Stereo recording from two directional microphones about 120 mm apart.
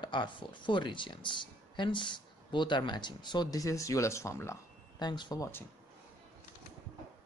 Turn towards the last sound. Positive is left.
turn(degrees=35)  # may be behind; listen again after turning